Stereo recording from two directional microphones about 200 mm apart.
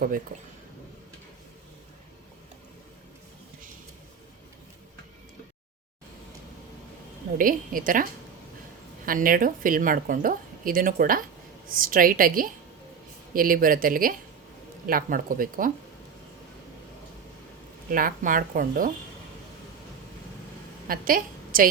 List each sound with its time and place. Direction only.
7.3 s speech: 45° right (ahead or behind)
9.0 s speech: 45° right (ahead or behind)
17.9 s speech: 45° right (ahead or behind)
20.8 s a woman's voice: 45° right (ahead or behind)